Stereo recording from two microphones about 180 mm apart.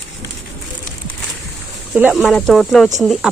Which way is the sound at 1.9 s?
5° right (ahead or behind).